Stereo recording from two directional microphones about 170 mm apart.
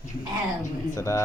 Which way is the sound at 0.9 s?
15° left (ahead or behind).